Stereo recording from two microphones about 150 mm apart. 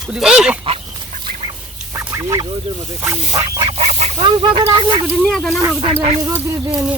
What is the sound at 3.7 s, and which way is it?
Goose, 50° right (ahead or behind).